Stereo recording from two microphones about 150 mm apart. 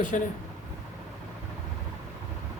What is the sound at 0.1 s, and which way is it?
Speech, 55° left (ahead or behind).